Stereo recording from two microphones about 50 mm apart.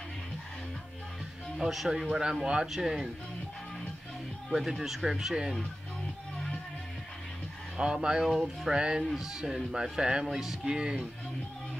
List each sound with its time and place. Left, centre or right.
1.6 s speech: centre
4.5 s speech: centre
7.7 s speech: centre
10.7 s speech: centre